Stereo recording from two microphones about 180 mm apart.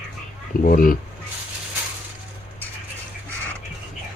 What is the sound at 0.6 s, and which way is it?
Speech, 50° left (ahead or behind).